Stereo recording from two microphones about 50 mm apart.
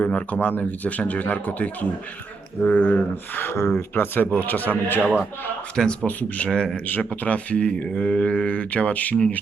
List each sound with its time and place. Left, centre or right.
0.0 s speech: left
3.4 s speech: left
3.8 s speech: left
4.9 s a man's voice: centre
5.7 s speech: centre
6.1 s speech: left